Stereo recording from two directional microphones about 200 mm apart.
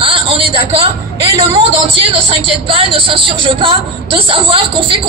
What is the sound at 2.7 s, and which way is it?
Speech, 25° right (ahead or behind).